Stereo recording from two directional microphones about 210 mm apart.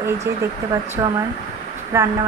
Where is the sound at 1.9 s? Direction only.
15° right (ahead or behind).